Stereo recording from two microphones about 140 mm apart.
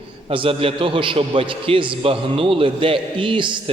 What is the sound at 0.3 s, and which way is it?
A man's voice, 40° right (ahead or behind).